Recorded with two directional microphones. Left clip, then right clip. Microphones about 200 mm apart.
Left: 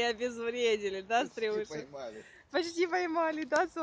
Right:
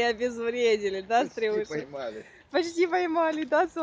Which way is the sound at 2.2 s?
Centre (ahead or behind).